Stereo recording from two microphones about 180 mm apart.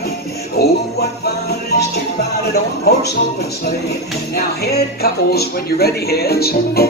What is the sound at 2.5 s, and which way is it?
Speech, 65° left (ahead or behind).